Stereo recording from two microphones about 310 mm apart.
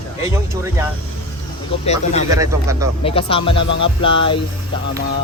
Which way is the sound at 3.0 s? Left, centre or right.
Centre.